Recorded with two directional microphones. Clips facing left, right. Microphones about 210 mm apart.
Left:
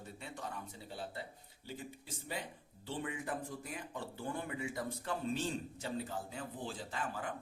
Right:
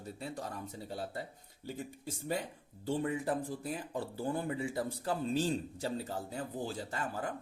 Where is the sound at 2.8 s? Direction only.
40° right (ahead or behind).